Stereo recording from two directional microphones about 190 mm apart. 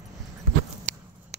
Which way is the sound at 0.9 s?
40° right (ahead or behind).